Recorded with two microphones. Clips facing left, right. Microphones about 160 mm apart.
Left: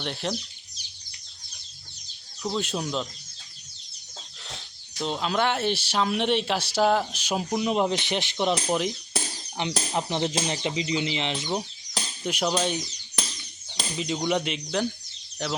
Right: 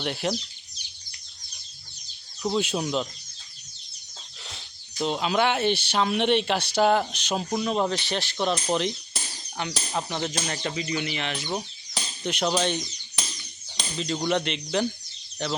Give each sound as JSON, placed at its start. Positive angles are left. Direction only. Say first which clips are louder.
{"t": 0.0, "sound": "speech", "louder": "right 3 dB", "side_deg": -5}
{"t": 2.4, "sound": "speech", "louder": "right 3 dB", "side_deg": -5}
{"t": 4.4, "sound": "speech", "louder": "left 3 dB", "side_deg": 0}
{"t": 8.5, "sound": "speech", "louder": "even", "side_deg": 5}
{"t": 9.6, "sound": "speech", "louder": "left 2 dB", "side_deg": 20}
{"t": 11.9, "sound": "speech", "louder": "even", "side_deg": 5}
{"t": 14.2, "sound": "speech", "louder": "right 1 dB", "side_deg": 5}